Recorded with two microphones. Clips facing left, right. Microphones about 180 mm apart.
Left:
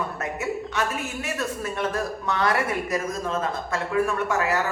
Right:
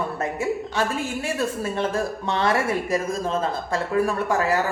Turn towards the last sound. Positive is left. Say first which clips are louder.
# right 2 dB
turn(degrees=-35)  # may be behind; listen again after turning